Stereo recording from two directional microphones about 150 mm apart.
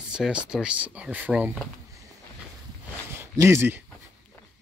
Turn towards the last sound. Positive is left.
turn(degrees=-15)  # may be behind; listen again after turning